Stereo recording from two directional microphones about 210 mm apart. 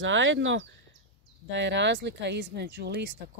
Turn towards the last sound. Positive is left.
turn(degrees=-50)  # may be behind; listen again after turning